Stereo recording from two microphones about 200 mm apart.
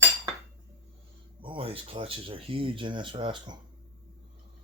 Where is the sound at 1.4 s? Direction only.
25° right (ahead or behind).